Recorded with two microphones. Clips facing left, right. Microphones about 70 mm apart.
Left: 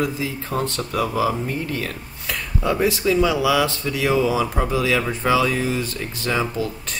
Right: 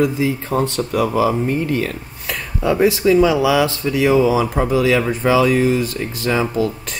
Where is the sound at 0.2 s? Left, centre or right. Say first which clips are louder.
Right 6 dB; right.